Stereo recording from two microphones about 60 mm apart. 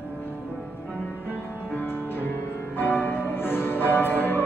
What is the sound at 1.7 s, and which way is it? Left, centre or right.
Music, left.